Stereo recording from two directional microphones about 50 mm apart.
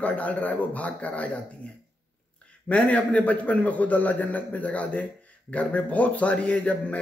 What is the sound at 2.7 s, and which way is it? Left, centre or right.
A man's voice, left.